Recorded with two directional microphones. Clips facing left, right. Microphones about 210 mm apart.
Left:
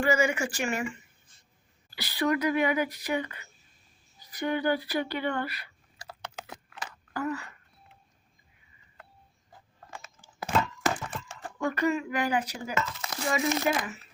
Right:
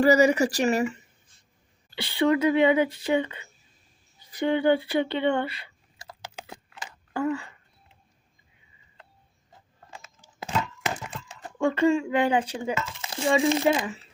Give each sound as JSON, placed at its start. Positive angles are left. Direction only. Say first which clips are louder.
{"t": 0.0, "sound": "speech", "louder": "right 7 dB", "side_deg": -35}
{"t": 1.9, "sound": "speech", "louder": "right 5 dB", "side_deg": -25}
{"t": 7.1, "sound": "speech", "louder": "right 5 dB", "side_deg": -25}
{"t": 11.4, "sound": "speech", "louder": "right 6 dB", "side_deg": -25}